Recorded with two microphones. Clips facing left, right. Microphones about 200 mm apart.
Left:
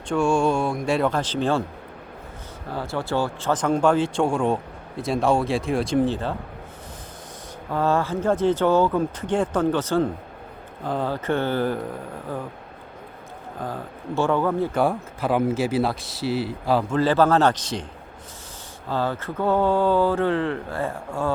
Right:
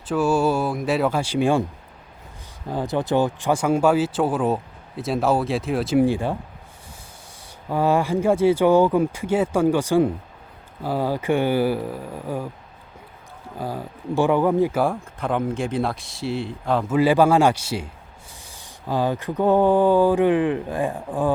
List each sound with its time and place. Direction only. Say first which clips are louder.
0.1 s speech: right 1 dB; 5° right (ahead or behind)
2.6 s speech: right 4 dB; 15° right (ahead or behind)
7.7 s speech: right 2 dB; 15° right (ahead or behind)
13.6 s speech: right 2 dB; 10° right (ahead or behind)
14.8 s speech: even; 5° left (ahead or behind)
16.9 s speech: right 3 dB; 10° right (ahead or behind)
18.9 s speech: right 3 dB; 15° right (ahead or behind)